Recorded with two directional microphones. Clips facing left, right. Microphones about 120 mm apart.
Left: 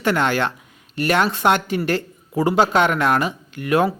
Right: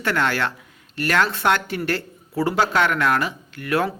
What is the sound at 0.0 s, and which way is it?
A man's voice, 20° left (ahead or behind).